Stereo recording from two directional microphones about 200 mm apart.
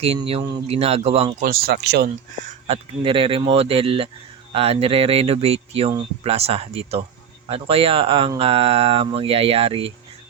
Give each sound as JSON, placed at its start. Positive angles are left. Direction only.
{"t": 0.0, "sound": "speech", "side_deg": -30}
{"t": 1.4, "sound": "speech", "side_deg": -45}
{"t": 2.6, "sound": "speech", "side_deg": -30}